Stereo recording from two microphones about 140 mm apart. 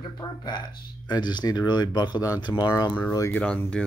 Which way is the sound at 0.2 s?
30° left (ahead or behind).